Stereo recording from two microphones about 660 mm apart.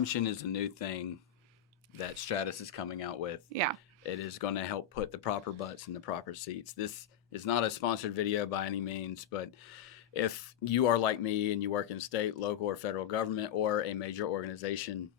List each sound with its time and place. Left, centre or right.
0.0 s speech: left
2.2 s speech: left
4.4 s speech: left